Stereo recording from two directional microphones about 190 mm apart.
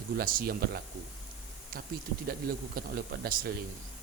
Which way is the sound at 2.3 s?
50° right (ahead or behind).